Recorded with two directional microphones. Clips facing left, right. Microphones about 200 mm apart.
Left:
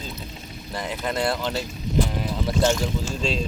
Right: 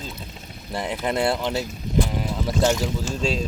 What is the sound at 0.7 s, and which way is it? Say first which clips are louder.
Speech: right 3 dB; 25° right (ahead or behind).